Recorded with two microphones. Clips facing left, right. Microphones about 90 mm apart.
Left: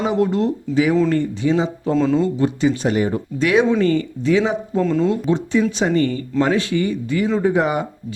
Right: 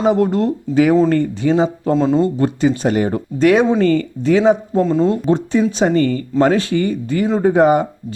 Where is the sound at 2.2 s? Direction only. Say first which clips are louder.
Right 3 dB; 50° right (ahead or behind).